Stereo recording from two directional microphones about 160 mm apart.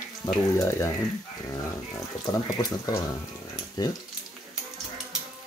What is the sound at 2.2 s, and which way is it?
Speech, 25° left (ahead or behind).